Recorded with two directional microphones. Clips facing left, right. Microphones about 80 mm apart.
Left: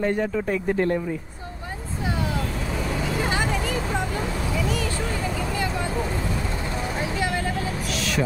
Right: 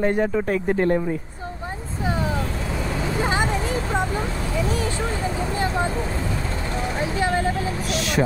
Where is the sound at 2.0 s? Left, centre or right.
Right.